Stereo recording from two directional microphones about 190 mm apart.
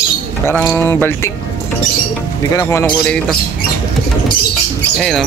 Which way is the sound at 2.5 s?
15° left (ahead or behind).